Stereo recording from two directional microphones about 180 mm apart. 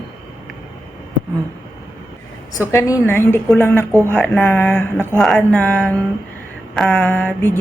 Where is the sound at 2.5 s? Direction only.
20° left (ahead or behind).